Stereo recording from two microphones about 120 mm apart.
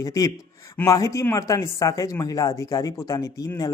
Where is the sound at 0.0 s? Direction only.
30° left (ahead or behind).